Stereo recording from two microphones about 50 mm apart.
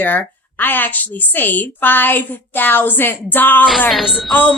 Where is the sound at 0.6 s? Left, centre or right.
Left.